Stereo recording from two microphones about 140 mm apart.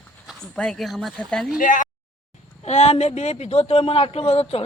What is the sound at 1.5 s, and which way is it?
Speech, 70° left (ahead or behind).